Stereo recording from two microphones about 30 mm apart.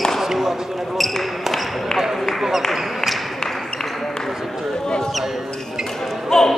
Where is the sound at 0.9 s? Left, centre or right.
Centre.